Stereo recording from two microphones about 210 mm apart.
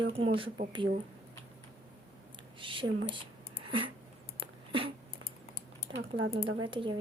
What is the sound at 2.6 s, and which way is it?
Speech, 25° right (ahead or behind).